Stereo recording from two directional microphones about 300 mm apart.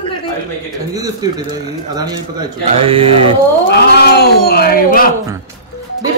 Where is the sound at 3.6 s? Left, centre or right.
Left.